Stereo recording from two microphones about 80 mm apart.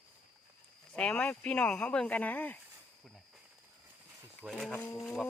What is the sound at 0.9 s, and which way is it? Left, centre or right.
Speech, centre.